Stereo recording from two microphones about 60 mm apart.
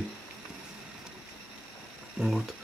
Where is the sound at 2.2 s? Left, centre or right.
Centre.